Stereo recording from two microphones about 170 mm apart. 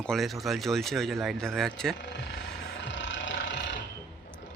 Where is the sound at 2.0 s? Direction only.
80° left.